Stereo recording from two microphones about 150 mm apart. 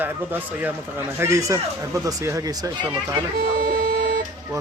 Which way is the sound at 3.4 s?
80° right.